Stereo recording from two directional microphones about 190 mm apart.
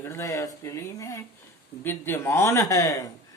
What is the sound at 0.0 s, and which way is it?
Speech, 15° left (ahead or behind).